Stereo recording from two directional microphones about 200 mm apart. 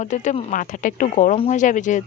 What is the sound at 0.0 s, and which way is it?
A woman's voice, 35° left (ahead or behind).